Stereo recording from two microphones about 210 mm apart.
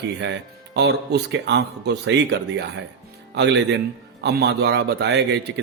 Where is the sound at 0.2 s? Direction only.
55° right (ahead or behind).